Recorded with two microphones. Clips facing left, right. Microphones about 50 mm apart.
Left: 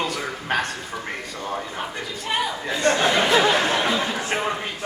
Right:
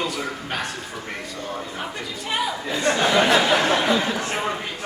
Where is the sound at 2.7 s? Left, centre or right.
Centre.